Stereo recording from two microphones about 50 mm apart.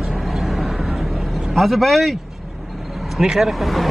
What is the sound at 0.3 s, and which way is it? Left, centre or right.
Vehicle, centre.